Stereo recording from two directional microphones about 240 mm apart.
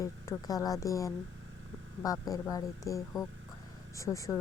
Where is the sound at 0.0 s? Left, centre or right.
Centre.